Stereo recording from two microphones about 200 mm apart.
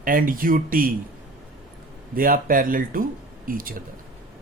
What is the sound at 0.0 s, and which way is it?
Speech, 45° right (ahead or behind).